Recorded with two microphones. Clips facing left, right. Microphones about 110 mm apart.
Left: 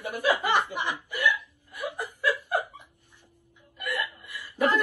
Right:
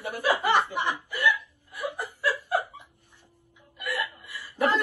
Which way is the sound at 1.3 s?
15° left (ahead or behind).